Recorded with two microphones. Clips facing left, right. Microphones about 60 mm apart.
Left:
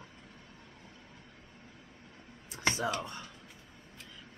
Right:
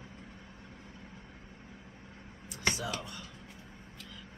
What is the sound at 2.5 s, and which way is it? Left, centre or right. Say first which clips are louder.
Whispering: left 2 dB; left.